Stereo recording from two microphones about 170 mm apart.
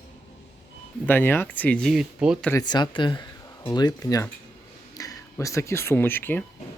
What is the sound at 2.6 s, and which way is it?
Speech, 25° left (ahead or behind).